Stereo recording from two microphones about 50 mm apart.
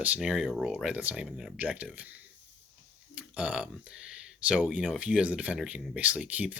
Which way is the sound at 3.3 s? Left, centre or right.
Right.